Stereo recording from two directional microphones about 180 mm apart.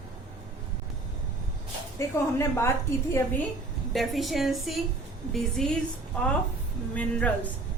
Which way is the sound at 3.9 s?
Centre (ahead or behind).